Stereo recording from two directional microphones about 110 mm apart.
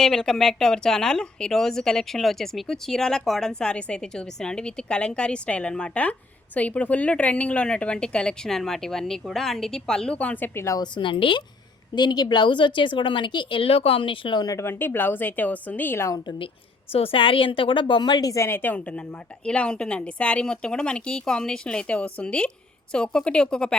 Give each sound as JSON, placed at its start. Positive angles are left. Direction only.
{"t": 0.0, "sound": "speech", "side_deg": 5}
{"t": 10.8, "sound": "speech", "side_deg": 45}
{"t": 11.9, "sound": "speech", "side_deg": 40}
{"t": 14.4, "sound": "speech", "side_deg": 25}
{"t": 16.9, "sound": "speech", "side_deg": 60}
{"t": 19.5, "sound": "speech", "side_deg": 10}